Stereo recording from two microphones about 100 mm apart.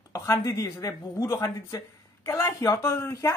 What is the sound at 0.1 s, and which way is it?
Speech, 30° left (ahead or behind).